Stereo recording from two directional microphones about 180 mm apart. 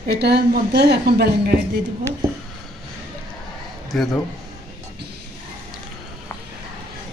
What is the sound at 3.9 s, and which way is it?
Speech, centre (ahead or behind).